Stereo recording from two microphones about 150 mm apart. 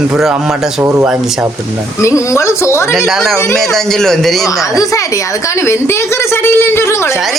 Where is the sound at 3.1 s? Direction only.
Centre (ahead or behind).